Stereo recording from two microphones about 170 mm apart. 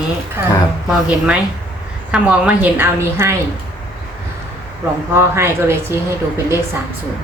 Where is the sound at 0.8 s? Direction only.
5° right (ahead or behind).